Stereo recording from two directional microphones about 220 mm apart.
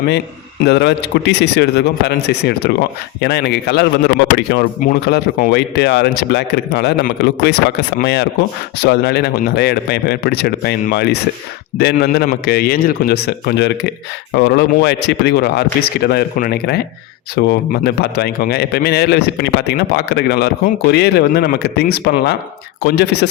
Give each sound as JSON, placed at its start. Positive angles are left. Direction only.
{"t": 0.6, "sound": "a man's voice", "side_deg": 50}